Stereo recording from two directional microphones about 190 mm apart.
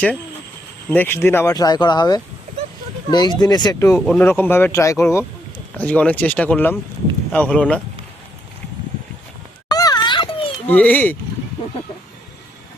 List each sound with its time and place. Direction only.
0.9 s speech: 10° left (ahead or behind)
9.6 s a sound: 20° left (ahead or behind)
10.7 s speech: 10° left (ahead or behind)